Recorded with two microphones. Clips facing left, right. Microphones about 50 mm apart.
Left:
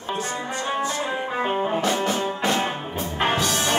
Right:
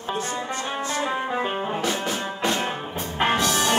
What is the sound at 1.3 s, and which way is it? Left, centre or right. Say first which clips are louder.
Music: left 2 dB; centre.